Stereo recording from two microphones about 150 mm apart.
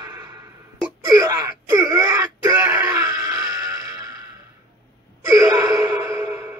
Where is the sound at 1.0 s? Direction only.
20° right (ahead or behind).